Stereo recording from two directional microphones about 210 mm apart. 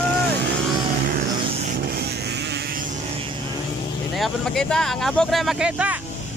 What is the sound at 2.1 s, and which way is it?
Vehicle, 50° right (ahead or behind).